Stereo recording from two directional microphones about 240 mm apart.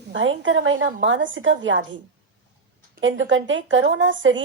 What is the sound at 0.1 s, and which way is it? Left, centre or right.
A woman's voice, right.